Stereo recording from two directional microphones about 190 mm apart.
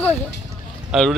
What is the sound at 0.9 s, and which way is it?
Speech, 5° right (ahead or behind).